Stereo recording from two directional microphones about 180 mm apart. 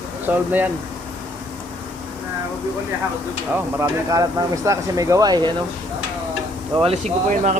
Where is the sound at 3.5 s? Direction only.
15° right (ahead or behind).